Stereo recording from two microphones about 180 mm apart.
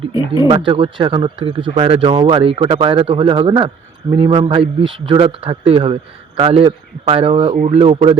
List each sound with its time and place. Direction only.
0.1 s speech: 25° left (ahead or behind)
0.4 s a man's voice: 30° right (ahead or behind)